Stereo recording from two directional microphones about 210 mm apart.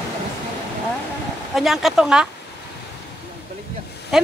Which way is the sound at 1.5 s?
Centre (ahead or behind).